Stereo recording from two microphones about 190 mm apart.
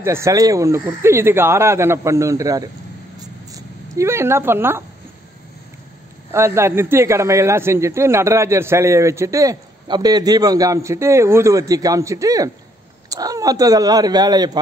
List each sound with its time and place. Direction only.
0.0 s a man's voice: 15° right (ahead or behind)
3.2 s a sound: 20° right (ahead or behind)
6.3 s a man's voice: 15° right (ahead or behind)